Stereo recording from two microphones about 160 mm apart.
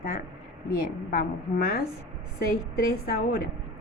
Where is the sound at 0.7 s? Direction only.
70° left (ahead or behind).